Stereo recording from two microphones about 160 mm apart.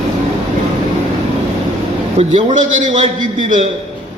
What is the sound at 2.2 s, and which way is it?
A man's voice, 35° right (ahead or behind).